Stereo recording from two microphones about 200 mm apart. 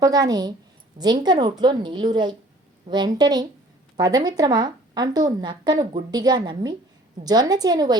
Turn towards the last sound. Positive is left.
turn(degrees=-20)  # may be behind; listen again after turning